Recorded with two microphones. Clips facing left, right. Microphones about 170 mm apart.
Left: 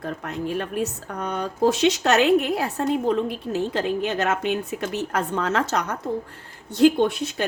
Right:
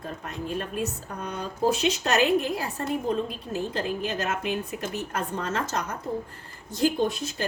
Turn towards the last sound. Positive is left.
turn(degrees=70)  # may be behind; listen again after turning